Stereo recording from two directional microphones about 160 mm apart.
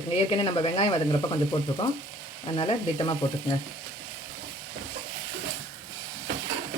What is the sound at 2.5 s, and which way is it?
Speech, 30° left (ahead or behind).